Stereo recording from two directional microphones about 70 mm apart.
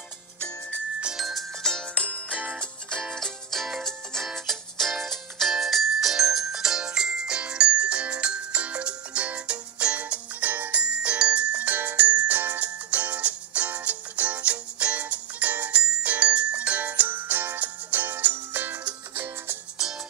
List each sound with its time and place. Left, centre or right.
1.0 s music: centre
2.1 s music: centre; by 19.6 s right